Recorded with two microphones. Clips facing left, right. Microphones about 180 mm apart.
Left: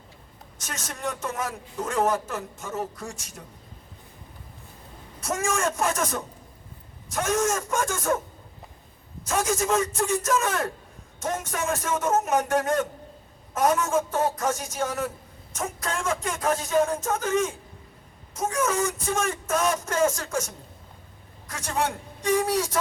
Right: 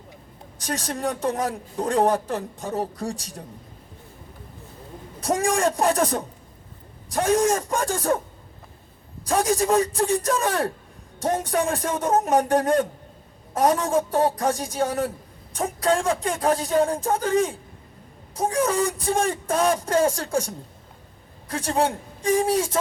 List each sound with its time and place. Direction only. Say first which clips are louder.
0.6 s speech: right 6 dB; 35° right (ahead or behind)
5.2 s speech: right 5 dB; 35° right (ahead or behind)
9.2 s a man's voice: right 4 dB; 35° right (ahead or behind)